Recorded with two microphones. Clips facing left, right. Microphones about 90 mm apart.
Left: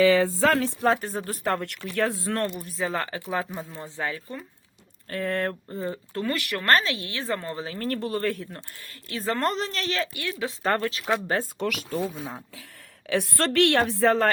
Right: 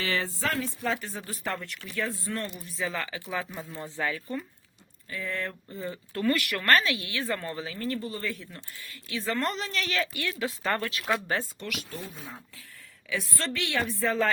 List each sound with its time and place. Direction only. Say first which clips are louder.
0.4 s speech: left 8 dB; 85° left
0.9 s speech: left 10 dB; 50° left (ahead or behind)
1.9 s a woman's voice: left 6 dB; 75° left (ahead or behind); by 3.7 s 35° left (ahead or behind)
3.7 s speech: even; 20° left (ahead or behind)
5.0 s speech: left 7 dB; 55° left (ahead or behind)
5.6 s a woman's voice: left 5 dB; 35° left (ahead or behind)
7.8 s a woman's voice: left 7 dB; 60° left (ahead or behind); by 10.5 s 20° left (ahead or behind)
10.7 s a woman's voice: left 5 dB; 40° left (ahead or behind)
11.1 s speech: left 2 dB; 5° left (ahead or behind)
11.9 s speech: left 10 dB; 90° left
13.1 s a woman's voice: left 7 dB; 70° left (ahead or behind)